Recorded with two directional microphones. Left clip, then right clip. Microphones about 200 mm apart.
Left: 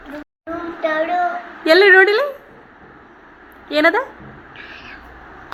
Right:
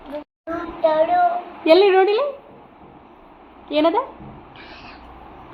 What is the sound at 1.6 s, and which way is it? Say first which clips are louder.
Speech: left 4 dB; 35° left (ahead or behind).